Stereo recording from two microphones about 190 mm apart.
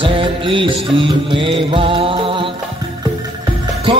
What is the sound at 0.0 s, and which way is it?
Music, 25° right (ahead or behind).